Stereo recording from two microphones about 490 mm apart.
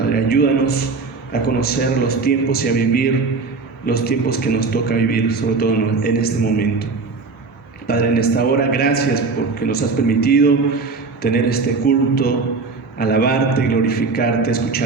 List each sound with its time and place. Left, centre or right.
0.1 s a sound: centre
1.3 s a man's voice: centre
7.9 s a man's voice: centre